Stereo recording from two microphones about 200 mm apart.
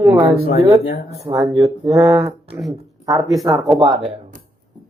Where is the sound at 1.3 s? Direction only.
20° right (ahead or behind).